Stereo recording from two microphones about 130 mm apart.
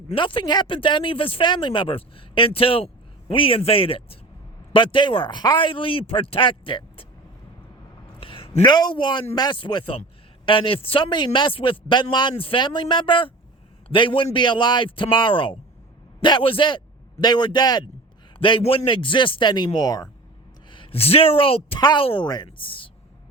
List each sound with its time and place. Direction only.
0.1 s a man's voice: 40° left (ahead or behind)
8.2 s a sound: 45° left (ahead or behind)
8.6 s a man's voice: 35° left (ahead or behind)
20.7 s a woman's voice: 40° left (ahead or behind)
21.8 s a man's voice: 35° left (ahead or behind)
22.0 s a woman's voice: 45° left (ahead or behind)